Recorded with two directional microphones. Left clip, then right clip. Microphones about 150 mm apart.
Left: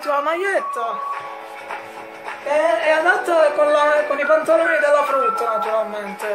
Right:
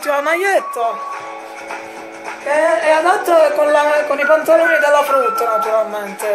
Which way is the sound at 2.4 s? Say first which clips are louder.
Right 3 dB; 5° left (ahead or behind).